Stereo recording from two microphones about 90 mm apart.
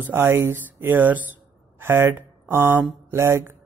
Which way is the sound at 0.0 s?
25° right (ahead or behind).